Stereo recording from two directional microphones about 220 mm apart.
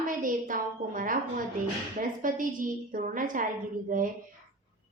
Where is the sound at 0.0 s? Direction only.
40° right (ahead or behind).